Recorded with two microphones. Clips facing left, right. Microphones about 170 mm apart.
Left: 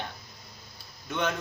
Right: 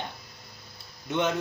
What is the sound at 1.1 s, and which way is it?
Speech, 20° right (ahead or behind).